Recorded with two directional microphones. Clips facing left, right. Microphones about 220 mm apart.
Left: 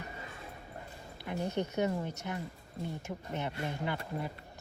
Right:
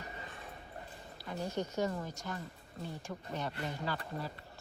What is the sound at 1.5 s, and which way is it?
Speech, 65° left (ahead or behind).